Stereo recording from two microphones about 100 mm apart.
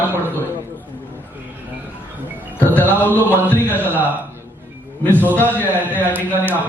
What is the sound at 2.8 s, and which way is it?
Mantra, 20° right (ahead or behind).